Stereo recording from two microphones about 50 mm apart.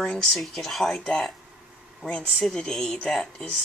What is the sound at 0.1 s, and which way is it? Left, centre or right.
Speech, centre.